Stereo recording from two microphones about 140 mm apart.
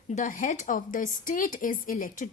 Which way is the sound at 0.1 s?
70° left (ahead or behind).